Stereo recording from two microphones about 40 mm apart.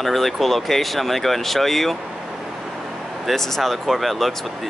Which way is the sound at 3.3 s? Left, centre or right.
Centre.